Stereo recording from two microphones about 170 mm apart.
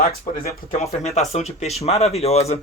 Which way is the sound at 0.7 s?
40° left (ahead or behind).